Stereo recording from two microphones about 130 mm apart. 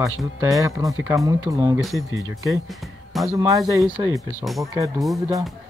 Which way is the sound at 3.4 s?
25° right (ahead or behind).